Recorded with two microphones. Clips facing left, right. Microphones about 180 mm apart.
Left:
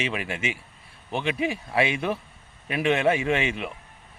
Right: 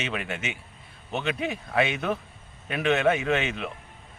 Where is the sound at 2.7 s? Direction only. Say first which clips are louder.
Left 1 dB; 5° left (ahead or behind).